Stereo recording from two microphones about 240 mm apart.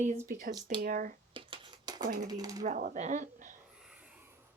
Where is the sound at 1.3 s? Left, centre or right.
Centre.